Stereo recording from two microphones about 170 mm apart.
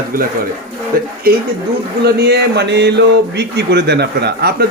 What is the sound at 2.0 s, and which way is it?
Speech, 70° right (ahead or behind).